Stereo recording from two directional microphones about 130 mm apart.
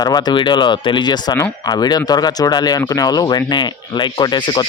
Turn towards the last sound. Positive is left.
turn(degrees=35)  # may be behind; listen again after turning